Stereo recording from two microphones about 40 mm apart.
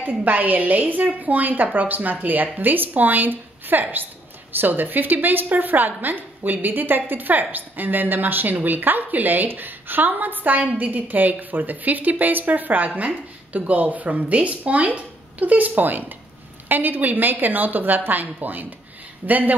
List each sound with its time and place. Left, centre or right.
0.0 s a woman's voice: right